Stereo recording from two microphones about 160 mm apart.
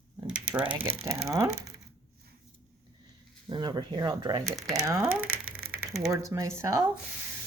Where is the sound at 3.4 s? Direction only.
25° right (ahead or behind).